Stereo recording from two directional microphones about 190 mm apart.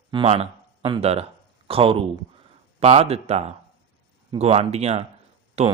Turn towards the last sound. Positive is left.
turn(degrees=-35)  # may be behind; listen again after turning